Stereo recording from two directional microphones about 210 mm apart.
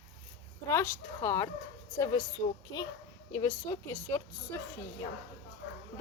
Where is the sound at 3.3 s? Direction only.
15° left (ahead or behind).